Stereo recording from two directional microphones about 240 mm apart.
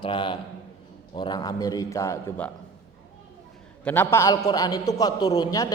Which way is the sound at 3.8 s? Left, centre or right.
Centre.